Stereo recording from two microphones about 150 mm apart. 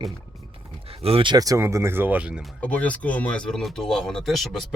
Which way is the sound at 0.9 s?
40° right (ahead or behind).